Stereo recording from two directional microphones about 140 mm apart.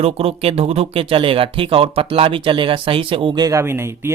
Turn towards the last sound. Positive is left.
turn(degrees=-20)  # may be behind; listen again after turning